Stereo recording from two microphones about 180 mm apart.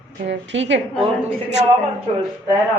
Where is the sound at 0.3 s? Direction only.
85° right.